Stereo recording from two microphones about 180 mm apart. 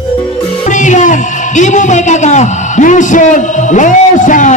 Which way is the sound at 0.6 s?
45° left (ahead or behind).